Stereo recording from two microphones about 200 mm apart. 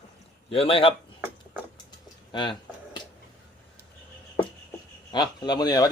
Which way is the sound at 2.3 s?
20° left (ahead or behind).